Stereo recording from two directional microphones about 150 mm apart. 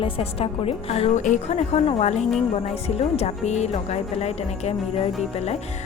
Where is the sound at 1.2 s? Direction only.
50° left (ahead or behind).